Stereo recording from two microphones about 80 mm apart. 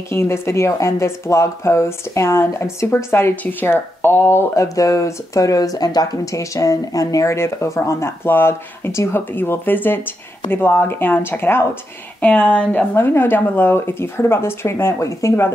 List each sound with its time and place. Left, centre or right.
0.1 s speech: left
4.6 s speech: left; by 12.8 s centre
12.9 s speech: left